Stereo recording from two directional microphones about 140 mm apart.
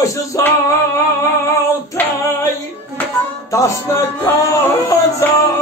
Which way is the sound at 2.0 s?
15° left (ahead or behind).